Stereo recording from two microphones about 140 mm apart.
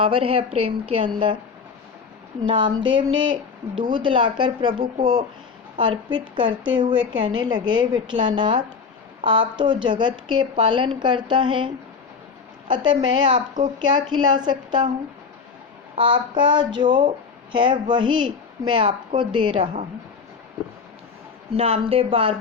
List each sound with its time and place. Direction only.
0.0 s a woman's voice: 40° right (ahead or behind)
2.5 s a woman's voice: 35° right (ahead or behind)
16.0 s a woman's voice: 35° right (ahead or behind)
21.5 s a woman's voice: 45° right (ahead or behind)